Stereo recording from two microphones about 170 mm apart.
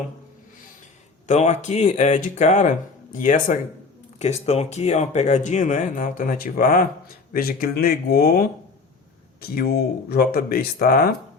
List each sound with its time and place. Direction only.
1.3 s speech: 40° left (ahead or behind)
4.2 s speech: 40° left (ahead or behind); by 11.1 s 60° left (ahead or behind)